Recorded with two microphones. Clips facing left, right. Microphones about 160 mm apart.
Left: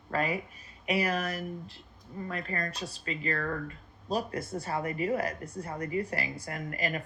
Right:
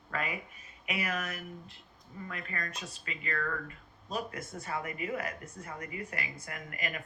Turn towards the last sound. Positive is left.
turn(degrees=35)  # may be behind; listen again after turning